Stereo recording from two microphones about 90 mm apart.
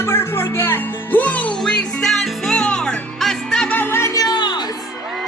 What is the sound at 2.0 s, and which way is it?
Music, 5° left (ahead or behind).